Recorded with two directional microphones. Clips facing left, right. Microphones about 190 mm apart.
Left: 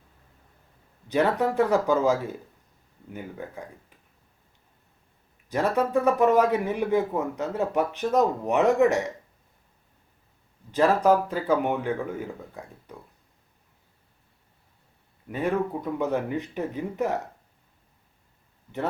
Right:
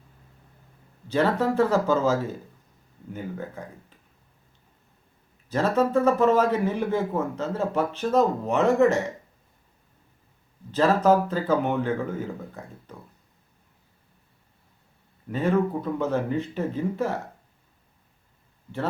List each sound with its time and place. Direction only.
1.0 s speech: 15° left (ahead or behind)
5.5 s speech: 15° left (ahead or behind)
10.7 s speech: 15° left (ahead or behind)
15.3 s speech: 15° left (ahead or behind)